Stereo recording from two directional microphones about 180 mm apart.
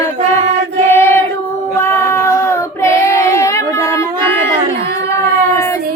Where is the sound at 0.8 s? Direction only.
15° left (ahead or behind).